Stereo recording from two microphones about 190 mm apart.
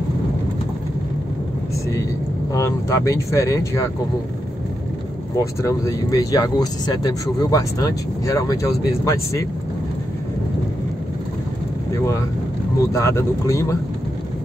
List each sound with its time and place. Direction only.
2.5 s speech: 15° left (ahead or behind)
5.3 s speech: 15° left (ahead or behind)
11.9 s speech: 15° left (ahead or behind)